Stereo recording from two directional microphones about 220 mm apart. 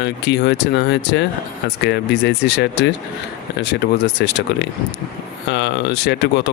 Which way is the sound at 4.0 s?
50° left (ahead or behind).